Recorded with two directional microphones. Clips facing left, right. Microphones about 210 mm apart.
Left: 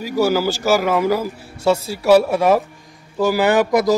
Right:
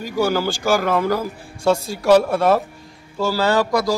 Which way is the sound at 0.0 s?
5° left (ahead or behind).